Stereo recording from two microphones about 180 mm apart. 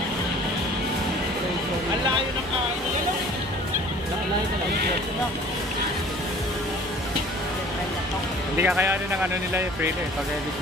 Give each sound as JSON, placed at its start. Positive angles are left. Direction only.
{"t": 8.5, "sound": "speech", "side_deg": -10}